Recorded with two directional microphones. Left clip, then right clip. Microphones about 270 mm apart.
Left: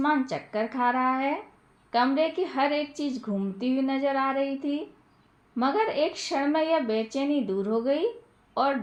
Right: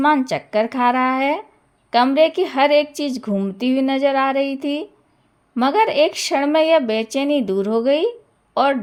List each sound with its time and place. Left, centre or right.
0.0 s a woman's voice: right